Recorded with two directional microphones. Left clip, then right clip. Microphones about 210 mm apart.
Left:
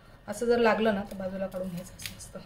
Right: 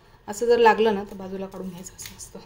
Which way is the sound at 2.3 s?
35° right (ahead or behind).